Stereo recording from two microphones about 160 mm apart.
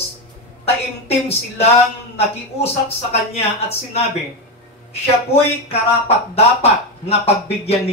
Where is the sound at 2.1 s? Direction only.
40° left (ahead or behind).